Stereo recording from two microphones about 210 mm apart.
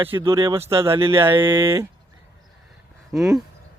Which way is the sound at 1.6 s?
10° right (ahead or behind).